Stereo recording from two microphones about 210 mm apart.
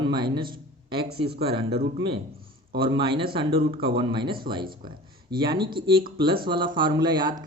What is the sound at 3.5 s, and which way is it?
Speech, 50° right (ahead or behind).